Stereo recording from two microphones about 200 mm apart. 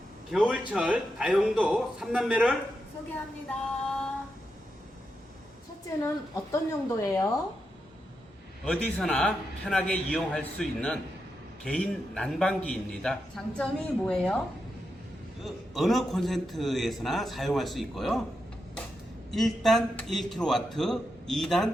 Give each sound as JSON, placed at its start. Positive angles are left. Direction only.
{"t": 0.3, "sound": "a man's voice", "side_deg": -5}
{"t": 3.1, "sound": "a sound", "side_deg": 5}
{"t": 6.0, "sound": "speech", "side_deg": 15}
{"t": 8.6, "sound": "a man's voice", "side_deg": 5}
{"t": 15.4, "sound": "a man's voice", "side_deg": 0}
{"t": 19.3, "sound": "a man's voice", "side_deg": 0}